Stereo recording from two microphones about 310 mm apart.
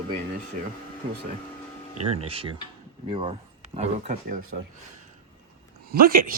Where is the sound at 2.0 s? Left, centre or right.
Right.